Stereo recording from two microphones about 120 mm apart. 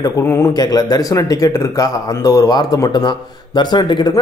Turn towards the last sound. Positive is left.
turn(degrees=40)  # may be behind; listen again after turning